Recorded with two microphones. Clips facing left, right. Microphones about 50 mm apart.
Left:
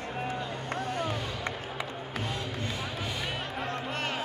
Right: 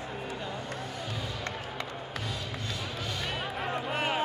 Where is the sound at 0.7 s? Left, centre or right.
Left.